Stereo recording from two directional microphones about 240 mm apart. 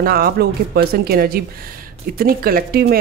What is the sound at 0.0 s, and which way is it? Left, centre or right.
Speech, right.